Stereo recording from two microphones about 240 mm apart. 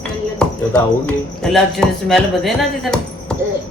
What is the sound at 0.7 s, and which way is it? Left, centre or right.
Speech, centre.